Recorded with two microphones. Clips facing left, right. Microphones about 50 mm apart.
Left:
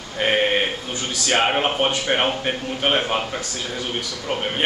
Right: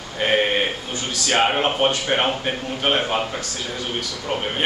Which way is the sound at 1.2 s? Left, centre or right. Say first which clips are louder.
Even; centre.